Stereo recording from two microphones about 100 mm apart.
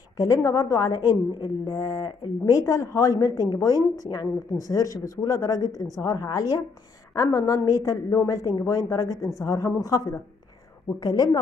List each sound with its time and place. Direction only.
0.2 s a woman's voice: 30° left (ahead or behind)